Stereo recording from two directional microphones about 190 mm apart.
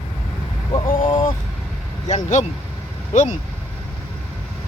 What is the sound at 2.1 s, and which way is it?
Speech, 40° left (ahead or behind).